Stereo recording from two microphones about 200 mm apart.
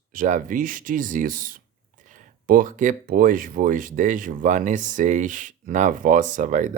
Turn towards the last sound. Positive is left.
turn(degrees=-40)  # may be behind; listen again after turning